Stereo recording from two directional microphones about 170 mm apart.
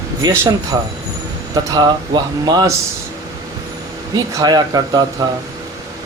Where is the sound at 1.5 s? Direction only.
25° right (ahead or behind).